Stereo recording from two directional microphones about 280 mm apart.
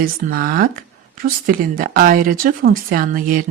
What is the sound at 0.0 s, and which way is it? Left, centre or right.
Speech, right.